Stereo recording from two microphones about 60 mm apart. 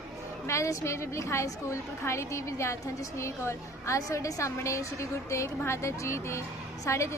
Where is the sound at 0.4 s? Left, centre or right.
Left.